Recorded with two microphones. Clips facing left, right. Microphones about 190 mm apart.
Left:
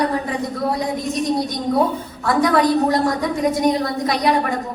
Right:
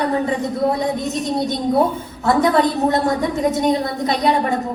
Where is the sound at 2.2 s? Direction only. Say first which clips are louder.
Right 1 dB; 25° right (ahead or behind).